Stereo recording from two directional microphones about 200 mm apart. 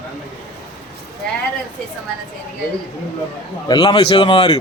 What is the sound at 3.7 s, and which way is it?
Speech, 20° left (ahead or behind).